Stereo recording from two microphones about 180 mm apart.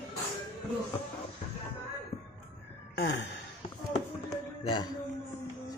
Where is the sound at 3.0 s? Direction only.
85° left.